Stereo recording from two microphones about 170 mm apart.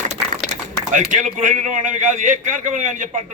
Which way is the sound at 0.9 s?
50° right (ahead or behind).